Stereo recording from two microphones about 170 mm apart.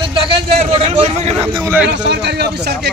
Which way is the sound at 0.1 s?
30° right (ahead or behind).